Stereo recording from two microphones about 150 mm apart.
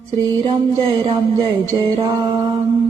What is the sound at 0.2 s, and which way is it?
Music, 35° right (ahead or behind).